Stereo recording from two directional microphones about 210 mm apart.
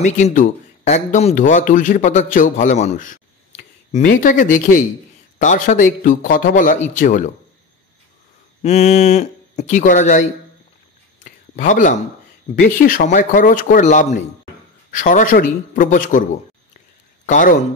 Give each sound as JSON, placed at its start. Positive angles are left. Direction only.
{"t": 0.0, "sound": "a man's voice", "side_deg": 35}
{"t": 8.6, "sound": "a man's voice", "side_deg": 30}
{"t": 11.2, "sound": "a man's voice", "side_deg": 40}
{"t": 17.3, "sound": "a man's voice", "side_deg": 40}